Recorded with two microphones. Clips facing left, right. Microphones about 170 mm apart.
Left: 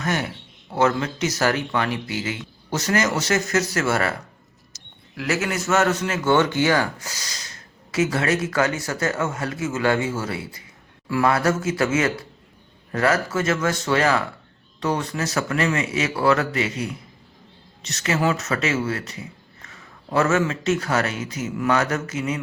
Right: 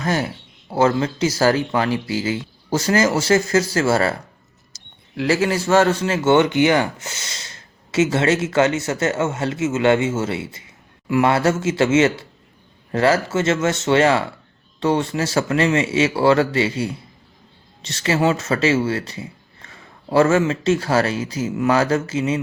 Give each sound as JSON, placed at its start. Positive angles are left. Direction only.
{"t": 0.0, "sound": "a man's voice", "side_deg": -35}
{"t": 4.7, "sound": "mouse", "side_deg": -30}
{"t": 5.1, "sound": "a man's voice", "side_deg": -30}